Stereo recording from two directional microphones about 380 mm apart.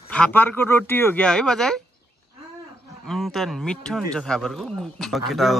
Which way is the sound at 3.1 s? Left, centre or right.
Centre.